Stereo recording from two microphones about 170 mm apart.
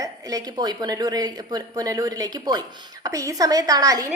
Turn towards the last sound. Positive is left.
turn(degrees=-20)  # may be behind; listen again after turning